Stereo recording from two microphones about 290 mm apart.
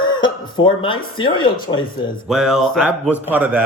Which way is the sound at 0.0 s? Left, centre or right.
Centre.